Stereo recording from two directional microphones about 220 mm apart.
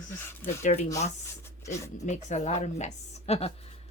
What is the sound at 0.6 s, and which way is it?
Speech, 30° left (ahead or behind).